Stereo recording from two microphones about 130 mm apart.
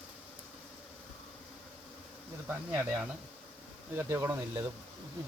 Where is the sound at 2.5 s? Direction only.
10° right (ahead or behind).